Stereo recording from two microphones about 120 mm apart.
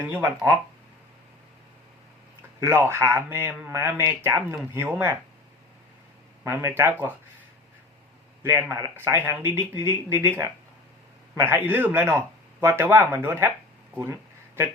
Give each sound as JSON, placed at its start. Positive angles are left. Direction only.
{"t": 0.0, "sound": "speech", "side_deg": -20}
{"t": 2.6, "sound": "speech", "side_deg": -20}
{"t": 6.4, "sound": "speech", "side_deg": -25}
{"t": 8.4, "sound": "a man's voice", "side_deg": -20}
{"t": 13.9, "sound": "a sound", "side_deg": -20}